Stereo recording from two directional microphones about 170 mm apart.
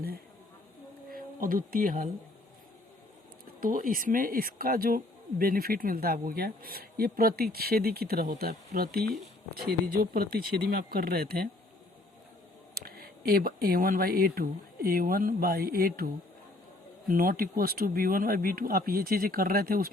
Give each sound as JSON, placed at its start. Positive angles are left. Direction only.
{"t": 1.1, "sound": "speech", "side_deg": -55}
{"t": 3.6, "sound": "speech", "side_deg": -55}
{"t": 12.7, "sound": "speech", "side_deg": -65}
{"t": 17.1, "sound": "speech", "side_deg": -55}